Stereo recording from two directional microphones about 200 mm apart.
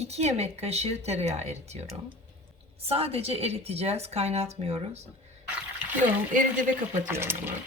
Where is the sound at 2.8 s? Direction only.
30° right (ahead or behind).